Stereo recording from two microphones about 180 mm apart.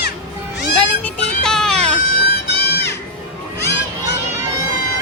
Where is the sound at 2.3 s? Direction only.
65° left (ahead or behind).